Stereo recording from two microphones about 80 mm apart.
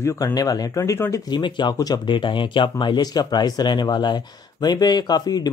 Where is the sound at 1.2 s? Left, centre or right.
Left.